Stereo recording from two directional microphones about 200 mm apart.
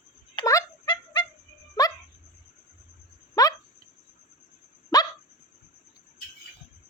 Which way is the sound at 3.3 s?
15° left (ahead or behind).